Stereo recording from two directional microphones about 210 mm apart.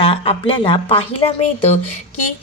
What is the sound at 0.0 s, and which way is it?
A woman's voice, 25° left (ahead or behind).